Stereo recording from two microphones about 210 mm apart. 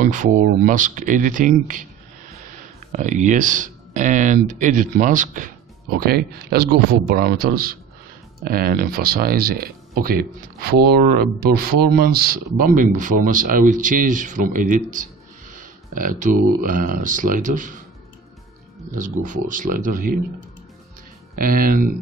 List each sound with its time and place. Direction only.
0.0 s speech: 40° right (ahead or behind)
2.9 s a man's voice: 35° right (ahead or behind)
11.9 s a man's voice: 45° right (ahead or behind)
18.9 s speech: 35° right (ahead or behind)
21.4 s a man's voice: 45° right (ahead or behind)